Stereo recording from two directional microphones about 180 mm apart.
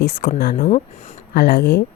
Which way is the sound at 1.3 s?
65° left (ahead or behind).